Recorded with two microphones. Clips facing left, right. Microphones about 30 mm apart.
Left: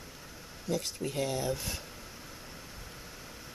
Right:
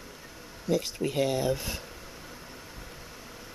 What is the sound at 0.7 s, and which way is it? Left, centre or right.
Speech, centre.